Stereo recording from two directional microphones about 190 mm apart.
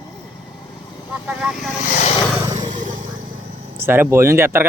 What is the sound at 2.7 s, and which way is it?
Vehicle, 40° right (ahead or behind).